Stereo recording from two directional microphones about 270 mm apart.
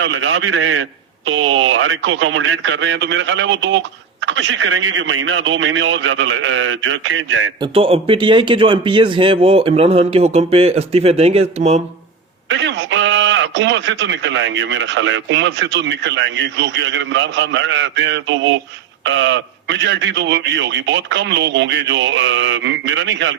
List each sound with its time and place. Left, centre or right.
0.0 s a man's voice: right
7.6 s speech: right
12.5 s a man's voice: right